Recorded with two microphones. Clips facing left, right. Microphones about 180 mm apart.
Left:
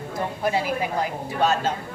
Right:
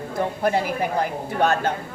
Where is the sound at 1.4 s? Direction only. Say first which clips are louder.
Right 1 dB; 60° right (ahead or behind).